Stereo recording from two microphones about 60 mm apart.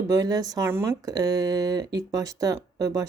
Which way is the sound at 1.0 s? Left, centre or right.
Right.